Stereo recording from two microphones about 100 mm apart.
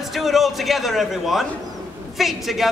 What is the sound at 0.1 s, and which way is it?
A man's voice, centre (ahead or behind).